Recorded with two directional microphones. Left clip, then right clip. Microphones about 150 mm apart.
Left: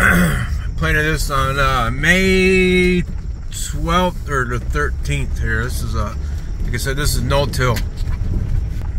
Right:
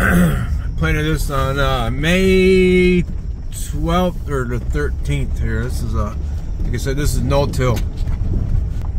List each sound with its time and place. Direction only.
0.0 s a man's voice: 20° right (ahead or behind)